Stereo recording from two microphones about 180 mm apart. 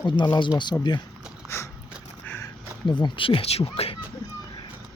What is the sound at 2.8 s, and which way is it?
Speech, 25° left (ahead or behind).